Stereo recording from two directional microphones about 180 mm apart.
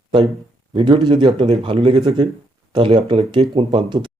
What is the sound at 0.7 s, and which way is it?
Speech, 30° right (ahead or behind).